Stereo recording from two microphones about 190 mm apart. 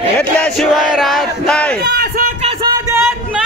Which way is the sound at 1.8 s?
55° right (ahead or behind).